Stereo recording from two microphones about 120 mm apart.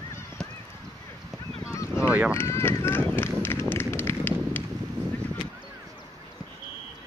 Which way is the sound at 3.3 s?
20° left (ahead or behind).